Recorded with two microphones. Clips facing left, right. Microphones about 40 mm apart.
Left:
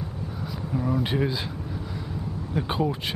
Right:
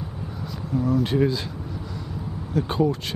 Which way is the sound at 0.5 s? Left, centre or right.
Centre.